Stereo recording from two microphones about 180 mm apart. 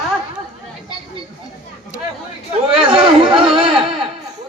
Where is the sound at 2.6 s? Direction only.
30° right (ahead or behind).